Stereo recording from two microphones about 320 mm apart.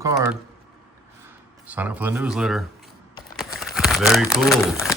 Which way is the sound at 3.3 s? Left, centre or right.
Centre.